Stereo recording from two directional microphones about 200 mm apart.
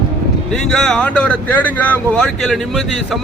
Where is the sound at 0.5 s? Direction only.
5° left (ahead or behind).